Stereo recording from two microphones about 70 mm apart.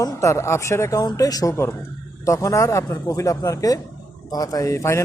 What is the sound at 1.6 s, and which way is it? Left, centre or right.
Speech, left.